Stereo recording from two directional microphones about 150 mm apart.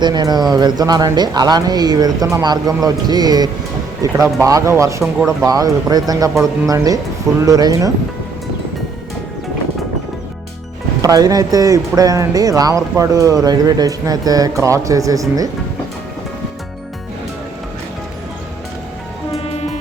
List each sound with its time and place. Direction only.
0.0 s speech: 30° right (ahead or behind)
11.0 s speech: 25° right (ahead or behind)